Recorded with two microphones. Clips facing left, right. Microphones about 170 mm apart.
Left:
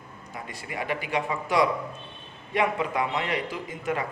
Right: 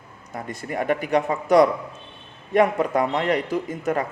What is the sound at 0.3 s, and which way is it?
Speech, 45° right (ahead or behind).